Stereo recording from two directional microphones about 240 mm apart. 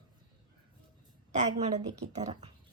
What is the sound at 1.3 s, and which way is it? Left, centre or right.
A woman's voice, right.